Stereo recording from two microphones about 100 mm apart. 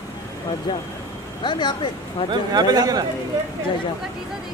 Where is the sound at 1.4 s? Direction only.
50° left (ahead or behind).